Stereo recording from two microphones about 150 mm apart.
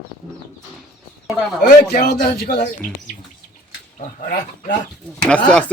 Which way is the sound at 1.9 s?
80° left.